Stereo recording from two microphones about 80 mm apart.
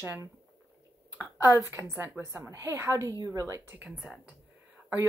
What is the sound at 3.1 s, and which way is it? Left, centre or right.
Speech, right.